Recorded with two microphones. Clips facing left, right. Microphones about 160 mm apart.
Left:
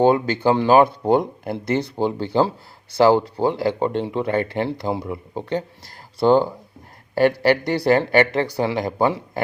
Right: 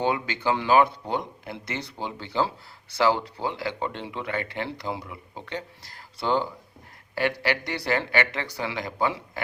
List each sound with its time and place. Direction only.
0.0 s speech: 40° left (ahead or behind)